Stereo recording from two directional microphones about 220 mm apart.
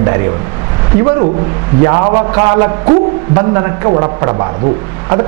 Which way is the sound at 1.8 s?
20° right (ahead or behind).